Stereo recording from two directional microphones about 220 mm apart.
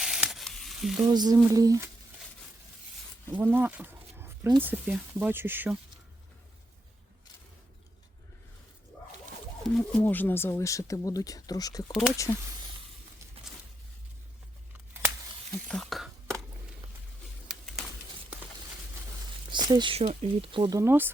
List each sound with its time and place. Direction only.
0.0 s sizzle: centre (ahead or behind)
1.0 s speech: 20° right (ahead or behind)
3.3 s wild animals: 10° right (ahead or behind)
4.6 s speech: 5° right (ahead or behind)
9.6 s speech: 5° left (ahead or behind)
11.9 s speech: centre (ahead or behind)
12.1 s speech: 15° left (ahead or behind)
15.7 s whispering: centre (ahead or behind)
19.5 s speech: 20° right (ahead or behind)